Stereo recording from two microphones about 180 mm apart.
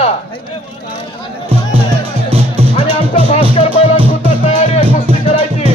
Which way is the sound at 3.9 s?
30° right (ahead or behind).